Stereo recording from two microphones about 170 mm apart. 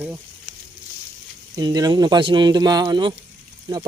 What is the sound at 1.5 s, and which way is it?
Speech, 25° right (ahead or behind).